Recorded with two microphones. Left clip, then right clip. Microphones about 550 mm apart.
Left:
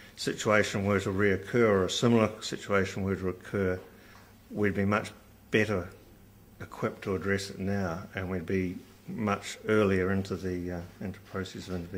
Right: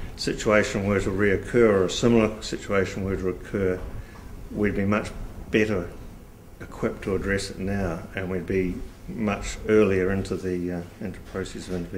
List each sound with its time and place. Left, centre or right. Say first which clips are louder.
0.2 s speech: right 5 dB; left